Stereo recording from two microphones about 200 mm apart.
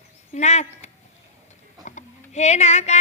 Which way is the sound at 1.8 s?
35° left (ahead or behind).